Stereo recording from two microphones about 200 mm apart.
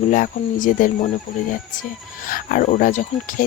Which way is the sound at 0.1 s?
40° left (ahead or behind).